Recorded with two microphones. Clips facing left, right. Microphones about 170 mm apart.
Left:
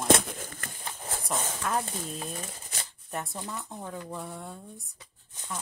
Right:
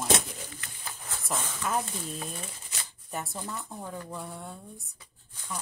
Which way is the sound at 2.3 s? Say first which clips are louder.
Left 2 dB; 40° left (ahead or behind).